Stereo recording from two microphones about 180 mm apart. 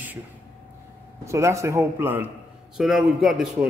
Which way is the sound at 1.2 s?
15° right (ahead or behind).